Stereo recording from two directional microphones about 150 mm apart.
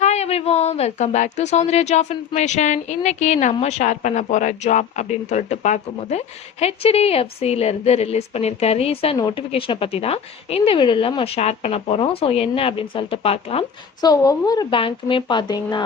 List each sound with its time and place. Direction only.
0.0 s a woman's voice: 45° left (ahead or behind)
14.0 s speech: 25° left (ahead or behind)